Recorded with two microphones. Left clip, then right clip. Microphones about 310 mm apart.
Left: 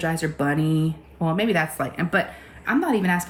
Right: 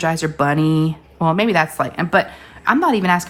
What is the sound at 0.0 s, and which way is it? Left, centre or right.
Speech, centre.